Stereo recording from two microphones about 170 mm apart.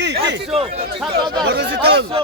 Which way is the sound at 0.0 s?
90° right.